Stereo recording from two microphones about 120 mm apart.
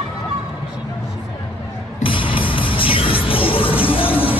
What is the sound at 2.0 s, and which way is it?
Music, 45° left (ahead or behind).